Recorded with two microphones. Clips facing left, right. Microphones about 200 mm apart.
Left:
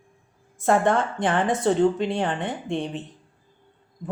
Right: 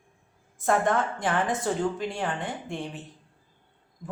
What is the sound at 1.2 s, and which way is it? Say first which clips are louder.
A woman's voice: left 5 dB; 30° left (ahead or behind).